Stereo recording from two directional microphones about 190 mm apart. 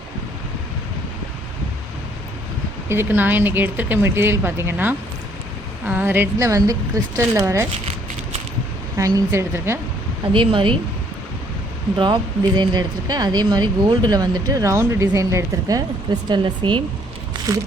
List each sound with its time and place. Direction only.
2.9 s speech: 10° right (ahead or behind)
9.0 s speech: 15° right (ahead or behind)
10.3 s speech: 25° right (ahead or behind)
11.9 s speech: 25° right (ahead or behind)